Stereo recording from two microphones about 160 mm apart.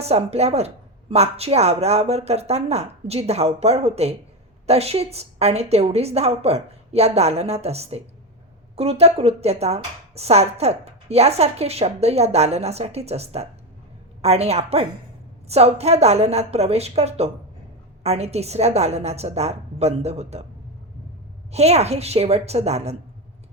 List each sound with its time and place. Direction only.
0.0 s a woman's voice: 40° right (ahead or behind)
21.5 s a woman's voice: 40° right (ahead or behind)